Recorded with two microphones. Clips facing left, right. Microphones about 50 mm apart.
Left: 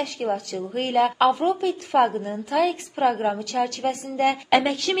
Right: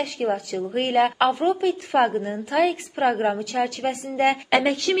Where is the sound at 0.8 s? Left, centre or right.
Right.